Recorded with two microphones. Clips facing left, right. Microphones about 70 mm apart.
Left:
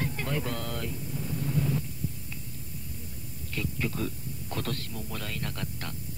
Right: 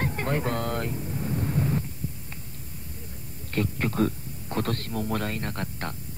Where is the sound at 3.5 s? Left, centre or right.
Right.